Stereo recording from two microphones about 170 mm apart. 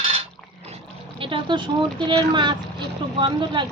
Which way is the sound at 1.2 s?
30° right (ahead or behind).